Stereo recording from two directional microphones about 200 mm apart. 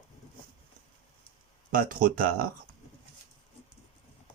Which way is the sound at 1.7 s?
45° right (ahead or behind).